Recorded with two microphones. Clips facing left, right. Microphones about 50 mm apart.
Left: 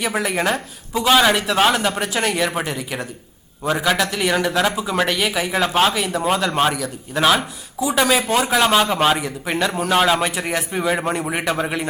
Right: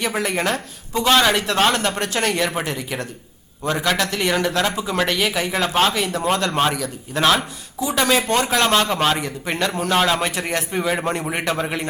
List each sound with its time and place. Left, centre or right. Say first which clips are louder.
0.0 s speech: left 1 dB; centre